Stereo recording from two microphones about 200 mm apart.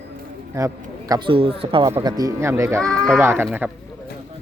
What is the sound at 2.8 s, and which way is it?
Speech, 5° left (ahead or behind).